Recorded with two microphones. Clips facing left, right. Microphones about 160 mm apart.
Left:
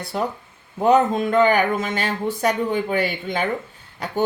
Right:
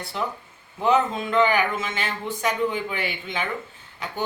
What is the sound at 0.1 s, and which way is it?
Speech, 45° left (ahead or behind).